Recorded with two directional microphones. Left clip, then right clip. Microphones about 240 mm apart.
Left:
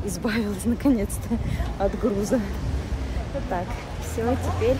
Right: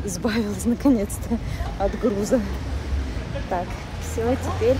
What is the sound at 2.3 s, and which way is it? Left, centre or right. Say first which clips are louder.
Speech: right 5 dB; centre.